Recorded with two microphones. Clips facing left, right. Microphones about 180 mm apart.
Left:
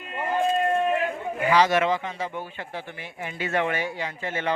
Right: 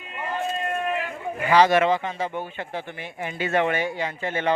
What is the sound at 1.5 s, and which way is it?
Speech, 55° right (ahead or behind).